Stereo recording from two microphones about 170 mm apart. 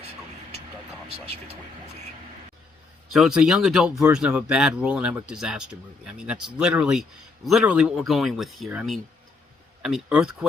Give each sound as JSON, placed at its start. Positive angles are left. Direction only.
{"t": 1.1, "sound": "speech", "side_deg": -35}
{"t": 3.1, "sound": "speech", "side_deg": 0}